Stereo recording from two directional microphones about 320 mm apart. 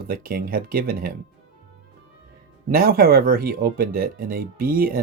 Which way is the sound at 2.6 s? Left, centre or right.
Right.